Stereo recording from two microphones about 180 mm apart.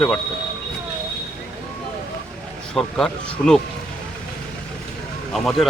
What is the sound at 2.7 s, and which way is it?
Speech, 5° left (ahead or behind).